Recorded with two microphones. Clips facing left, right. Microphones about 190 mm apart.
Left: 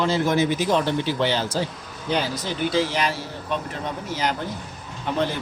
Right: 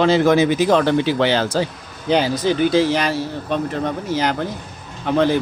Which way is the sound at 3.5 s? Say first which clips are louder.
Right 7 dB; 80° right.